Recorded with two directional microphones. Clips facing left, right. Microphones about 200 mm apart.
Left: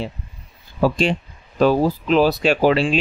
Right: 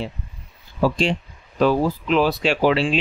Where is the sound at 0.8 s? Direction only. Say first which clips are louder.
Left 2 dB; 55° left (ahead or behind).